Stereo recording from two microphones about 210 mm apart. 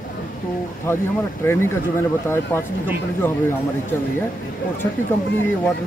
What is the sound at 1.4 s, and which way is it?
Speech, 10° left (ahead or behind).